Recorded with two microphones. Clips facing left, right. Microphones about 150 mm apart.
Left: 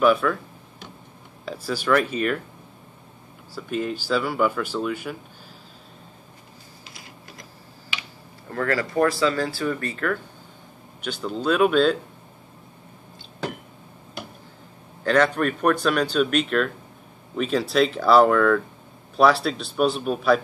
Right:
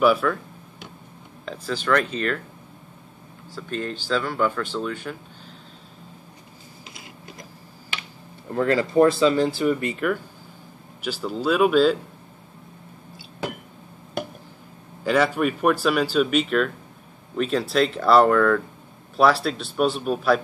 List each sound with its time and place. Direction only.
0.0 s a sound: centre (ahead or behind)
1.4 s speech: 10° left (ahead or behind)
3.5 s speech: 10° left (ahead or behind)
8.5 s speech: 20° right (ahead or behind); by 12.0 s 5° right (ahead or behind)
15.0 s speech: 10° right (ahead or behind)